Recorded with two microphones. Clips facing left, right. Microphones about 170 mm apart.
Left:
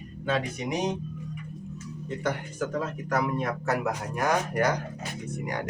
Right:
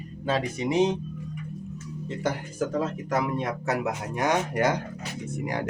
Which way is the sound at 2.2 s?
30° right (ahead or behind).